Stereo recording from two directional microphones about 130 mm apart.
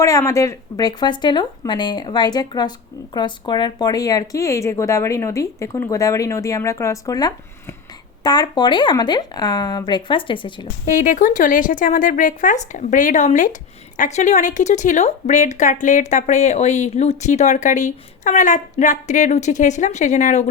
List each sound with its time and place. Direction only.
0.0 s speech: 20° left (ahead or behind); by 10.7 s 40° left (ahead or behind)
10.8 s speech: 80° left